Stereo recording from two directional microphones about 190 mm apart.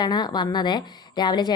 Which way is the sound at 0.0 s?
20° left (ahead or behind).